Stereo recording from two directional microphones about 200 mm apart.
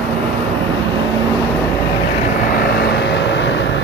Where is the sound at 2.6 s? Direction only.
55° left (ahead or behind).